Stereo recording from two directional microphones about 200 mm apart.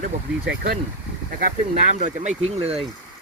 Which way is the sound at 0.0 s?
40° right (ahead or behind).